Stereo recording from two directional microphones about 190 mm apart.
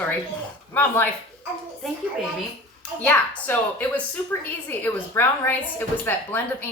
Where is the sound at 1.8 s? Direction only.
Centre (ahead or behind).